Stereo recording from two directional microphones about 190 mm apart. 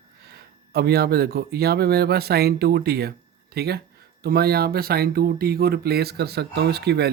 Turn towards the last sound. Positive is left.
turn(degrees=-60)  # may be behind; listen again after turning